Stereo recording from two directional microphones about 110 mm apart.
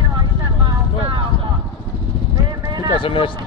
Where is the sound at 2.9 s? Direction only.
50° left (ahead or behind).